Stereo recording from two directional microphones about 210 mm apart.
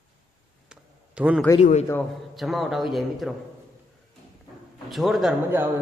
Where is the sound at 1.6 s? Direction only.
35° left (ahead or behind).